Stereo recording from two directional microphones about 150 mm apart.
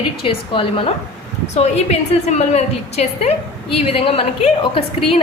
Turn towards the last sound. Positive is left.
turn(degrees=40)  # may be behind; listen again after turning